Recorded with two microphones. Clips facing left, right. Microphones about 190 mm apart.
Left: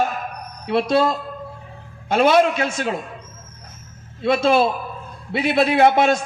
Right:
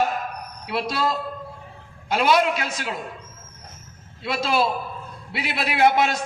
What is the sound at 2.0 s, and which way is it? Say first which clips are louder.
Speech: left 5 dB; 50° left (ahead or behind).